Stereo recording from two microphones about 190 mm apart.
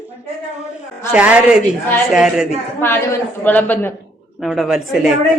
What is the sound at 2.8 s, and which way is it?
A woman's voice, 10° left (ahead or behind).